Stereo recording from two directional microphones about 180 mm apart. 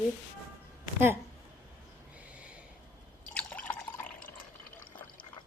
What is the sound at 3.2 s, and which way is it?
Drip, 5° left (ahead or behind).